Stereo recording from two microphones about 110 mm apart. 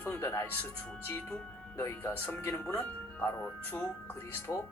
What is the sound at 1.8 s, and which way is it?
Speech, 20° left (ahead or behind).